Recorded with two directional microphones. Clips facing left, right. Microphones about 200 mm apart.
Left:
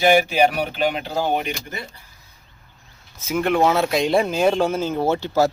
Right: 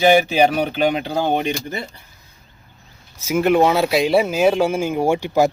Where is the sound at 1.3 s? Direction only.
30° right (ahead or behind).